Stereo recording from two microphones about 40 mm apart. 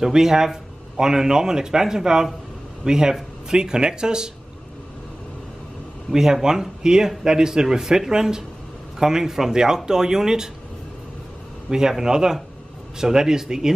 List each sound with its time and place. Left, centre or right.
0.0 s speech: centre
6.1 s speech: centre
12.0 s speech: centre